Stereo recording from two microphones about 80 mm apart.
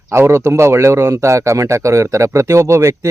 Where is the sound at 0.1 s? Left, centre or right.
Right.